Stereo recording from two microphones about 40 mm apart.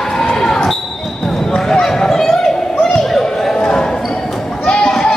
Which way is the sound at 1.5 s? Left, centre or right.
Centre.